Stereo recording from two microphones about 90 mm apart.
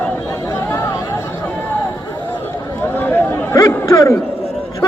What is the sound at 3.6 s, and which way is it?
Chatter, 35° left (ahead or behind).